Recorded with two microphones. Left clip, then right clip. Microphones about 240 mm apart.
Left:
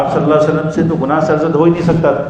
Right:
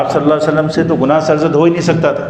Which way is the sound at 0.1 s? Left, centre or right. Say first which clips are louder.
Even; right.